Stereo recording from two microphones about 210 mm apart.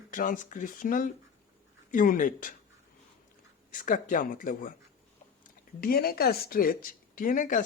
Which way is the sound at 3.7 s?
40° left (ahead or behind).